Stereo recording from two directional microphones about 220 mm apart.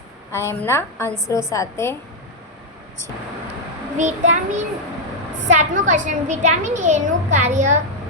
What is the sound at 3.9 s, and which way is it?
A woman's voice, 35° right (ahead or behind).